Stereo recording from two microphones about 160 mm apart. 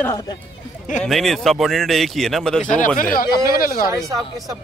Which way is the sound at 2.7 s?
55° left (ahead or behind).